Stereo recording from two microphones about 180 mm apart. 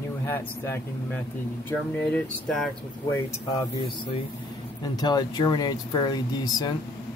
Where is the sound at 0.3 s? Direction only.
10° left (ahead or behind).